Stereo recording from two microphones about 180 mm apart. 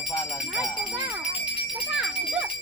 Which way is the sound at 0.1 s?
15° left (ahead or behind).